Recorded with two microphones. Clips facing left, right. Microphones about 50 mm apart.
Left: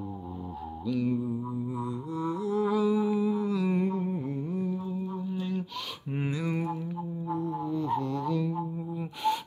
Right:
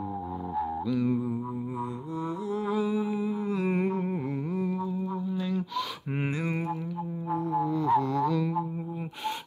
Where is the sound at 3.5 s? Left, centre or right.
Right.